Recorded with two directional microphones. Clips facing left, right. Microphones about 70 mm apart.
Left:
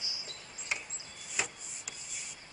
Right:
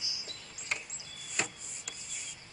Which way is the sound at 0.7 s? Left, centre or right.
Centre.